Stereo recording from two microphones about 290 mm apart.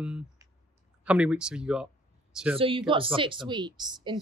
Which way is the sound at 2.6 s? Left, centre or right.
Centre.